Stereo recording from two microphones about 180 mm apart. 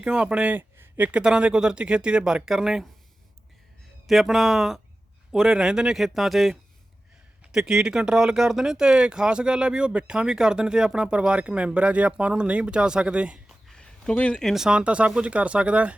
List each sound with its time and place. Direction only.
0.0 s speech: 5° right (ahead or behind)
4.0 s speech: centre (ahead or behind)